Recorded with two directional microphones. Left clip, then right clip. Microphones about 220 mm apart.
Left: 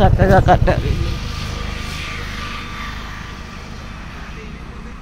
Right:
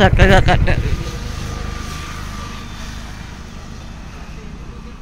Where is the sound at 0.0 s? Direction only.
15° right (ahead or behind).